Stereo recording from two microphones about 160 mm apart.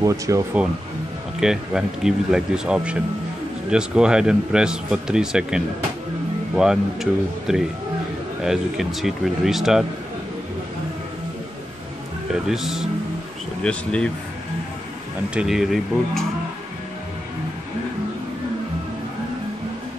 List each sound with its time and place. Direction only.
0.0 s speech: 20° right (ahead or behind)
1.4 s a man's voice: 5° right (ahead or behind)
12.3 s a man's voice: 5° right (ahead or behind)
15.3 s a man's voice: centre (ahead or behind)